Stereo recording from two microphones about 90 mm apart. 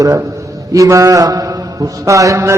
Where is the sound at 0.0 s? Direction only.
35° right (ahead or behind).